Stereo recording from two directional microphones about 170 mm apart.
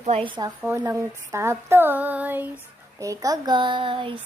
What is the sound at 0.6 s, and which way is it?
Speech, 15° right (ahead or behind).